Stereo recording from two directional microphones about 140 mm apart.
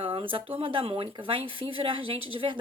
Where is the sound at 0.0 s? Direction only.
35° right (ahead or behind).